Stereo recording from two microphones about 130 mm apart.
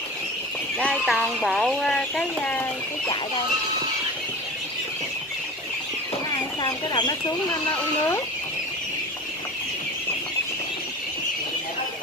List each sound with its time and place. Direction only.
0.7 s a sound: 5° right (ahead or behind)
1.2 s speech: centre (ahead or behind)
6.3 s speech: 30° left (ahead or behind)